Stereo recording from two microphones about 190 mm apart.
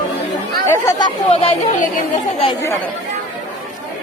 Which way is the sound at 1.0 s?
30° left (ahead or behind).